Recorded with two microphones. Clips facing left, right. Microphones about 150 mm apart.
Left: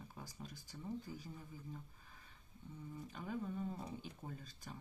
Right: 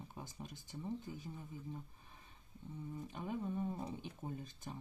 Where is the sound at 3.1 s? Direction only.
20° right (ahead or behind).